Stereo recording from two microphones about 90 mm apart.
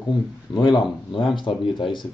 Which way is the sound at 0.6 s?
55° left (ahead or behind).